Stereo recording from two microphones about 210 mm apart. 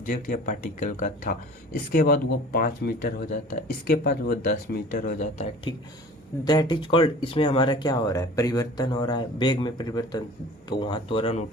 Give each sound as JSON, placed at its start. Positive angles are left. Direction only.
{"t": 0.0, "sound": "speech", "side_deg": 40}
{"t": 5.7, "sound": "speech", "side_deg": 20}